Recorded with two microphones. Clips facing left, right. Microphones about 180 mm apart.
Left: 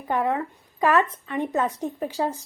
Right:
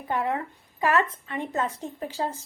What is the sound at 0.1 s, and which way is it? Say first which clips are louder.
A woman's voice: left 3 dB; 20° left (ahead or behind).